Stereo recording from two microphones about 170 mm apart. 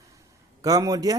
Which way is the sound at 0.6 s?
20° right (ahead or behind).